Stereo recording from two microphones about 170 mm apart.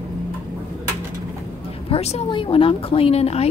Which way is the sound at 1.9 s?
35° left (ahead or behind).